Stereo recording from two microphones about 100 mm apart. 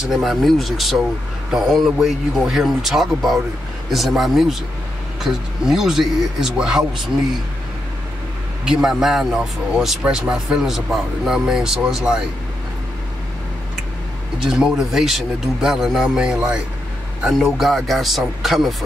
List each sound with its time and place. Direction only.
0.1 s speech: centre (ahead or behind)
8.6 s speech: 5° right (ahead or behind)
14.4 s speech: 5° right (ahead or behind)